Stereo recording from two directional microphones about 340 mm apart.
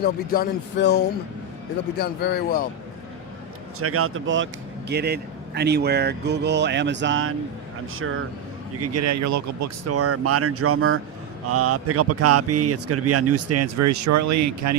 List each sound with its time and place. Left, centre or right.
0.0 s speech: left
3.8 s speech: right